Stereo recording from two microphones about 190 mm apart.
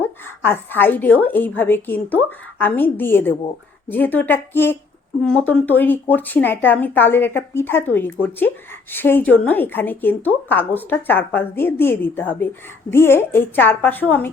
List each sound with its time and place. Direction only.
0.0 s a woman's voice: 10° left (ahead or behind)